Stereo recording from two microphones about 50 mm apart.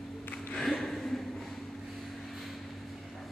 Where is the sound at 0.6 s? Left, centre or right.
Centre.